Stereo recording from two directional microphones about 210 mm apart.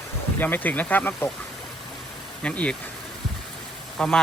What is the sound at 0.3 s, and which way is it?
Speech, 10° left (ahead or behind).